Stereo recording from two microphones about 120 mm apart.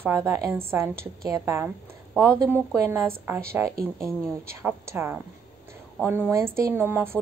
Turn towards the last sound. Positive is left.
turn(degrees=-20)  # may be behind; listen again after turning